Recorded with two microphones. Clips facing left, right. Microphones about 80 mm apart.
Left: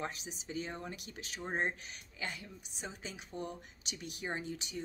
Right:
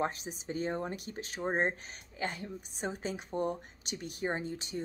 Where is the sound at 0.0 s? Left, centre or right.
Right.